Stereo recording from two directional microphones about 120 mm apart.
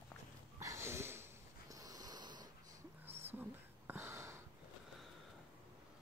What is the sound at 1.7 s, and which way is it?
Snort, 30° right (ahead or behind).